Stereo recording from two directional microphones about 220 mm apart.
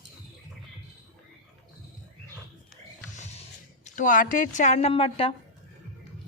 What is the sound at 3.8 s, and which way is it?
A woman's voice, 35° left (ahead or behind).